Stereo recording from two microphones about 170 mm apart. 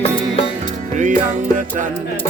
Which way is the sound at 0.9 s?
50° right (ahead or behind).